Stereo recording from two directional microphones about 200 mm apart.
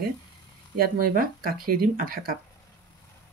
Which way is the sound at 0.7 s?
45° right (ahead or behind).